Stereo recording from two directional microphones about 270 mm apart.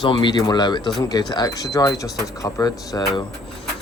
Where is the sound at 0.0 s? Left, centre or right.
Centre.